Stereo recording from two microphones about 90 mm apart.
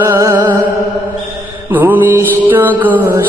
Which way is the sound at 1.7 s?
20° right (ahead or behind).